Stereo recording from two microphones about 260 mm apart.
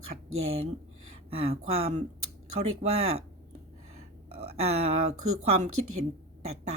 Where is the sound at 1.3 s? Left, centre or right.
Right.